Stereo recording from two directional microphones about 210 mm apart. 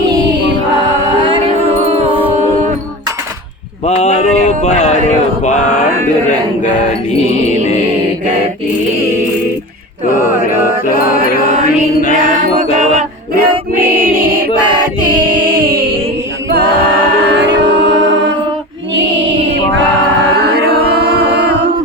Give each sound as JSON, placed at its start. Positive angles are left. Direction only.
{"t": 1.2, "sound": "music", "side_deg": -25}
{"t": 3.8, "sound": "a sound", "side_deg": 30}
{"t": 10.8, "sound": "mantra", "side_deg": 40}
{"t": 12.8, "sound": "battle cry", "side_deg": -35}
{"t": 16.5, "sound": "a capella", "side_deg": -50}
{"t": 17.2, "sound": "music", "side_deg": -55}
{"t": 20.4, "sound": "chant", "side_deg": -50}